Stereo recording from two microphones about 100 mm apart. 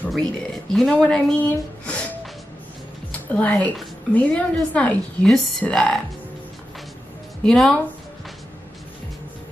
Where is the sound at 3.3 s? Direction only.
15° left (ahead or behind).